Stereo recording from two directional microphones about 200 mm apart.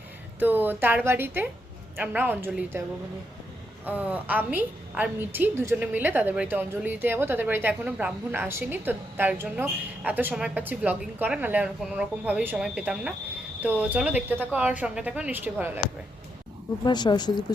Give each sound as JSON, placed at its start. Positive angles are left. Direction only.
{"t": 0.3, "sound": "a woman's voice", "side_deg": -10}
{"t": 3.8, "sound": "a woman's voice", "side_deg": -10}
{"t": 16.8, "sound": "speech", "side_deg": 20}